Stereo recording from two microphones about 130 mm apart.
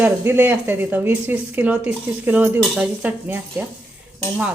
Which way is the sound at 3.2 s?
15° right (ahead or behind).